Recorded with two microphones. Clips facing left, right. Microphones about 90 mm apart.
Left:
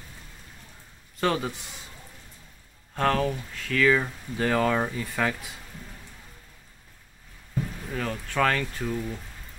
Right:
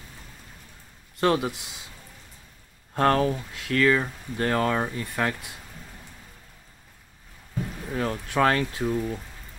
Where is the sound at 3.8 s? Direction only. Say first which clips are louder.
Left 1 dB; centre (ahead or behind).